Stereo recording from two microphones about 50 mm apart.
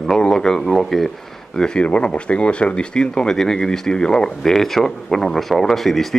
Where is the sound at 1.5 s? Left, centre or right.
Centre.